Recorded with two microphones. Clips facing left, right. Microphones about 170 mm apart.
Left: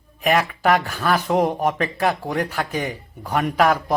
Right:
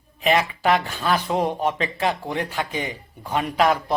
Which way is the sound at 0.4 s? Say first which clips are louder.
Left 2 dB; 15° right (ahead or behind).